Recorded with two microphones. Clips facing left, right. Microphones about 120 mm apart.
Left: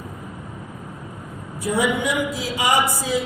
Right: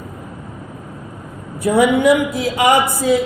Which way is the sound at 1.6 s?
55° right (ahead or behind).